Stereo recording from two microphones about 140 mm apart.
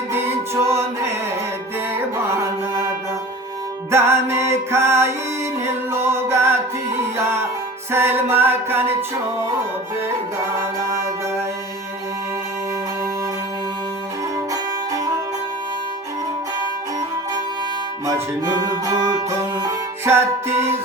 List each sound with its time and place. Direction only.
0.1 s a capella: 15° right (ahead or behind)
2.1 s music: 20° right (ahead or behind)
3.9 s music: 20° right (ahead or behind)
7.9 s music: 15° right (ahead or behind)
18.0 s music: 25° right (ahead or behind)